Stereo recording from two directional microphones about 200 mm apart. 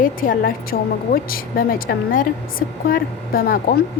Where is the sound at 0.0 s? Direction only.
45° left (ahead or behind).